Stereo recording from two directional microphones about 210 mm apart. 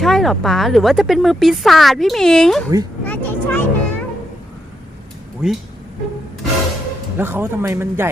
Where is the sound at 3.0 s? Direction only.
10° left (ahead or behind).